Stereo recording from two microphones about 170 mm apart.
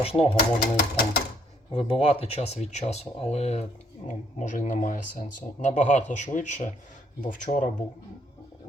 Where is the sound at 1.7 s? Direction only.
35° left (ahead or behind).